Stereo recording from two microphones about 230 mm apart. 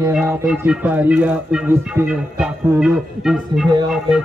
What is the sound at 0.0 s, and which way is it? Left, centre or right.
Music, centre.